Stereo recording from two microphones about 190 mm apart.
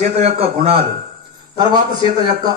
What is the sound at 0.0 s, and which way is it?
Speech, 35° right (ahead or behind).